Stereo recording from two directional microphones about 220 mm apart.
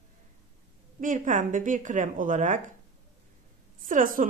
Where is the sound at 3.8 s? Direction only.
40° right (ahead or behind).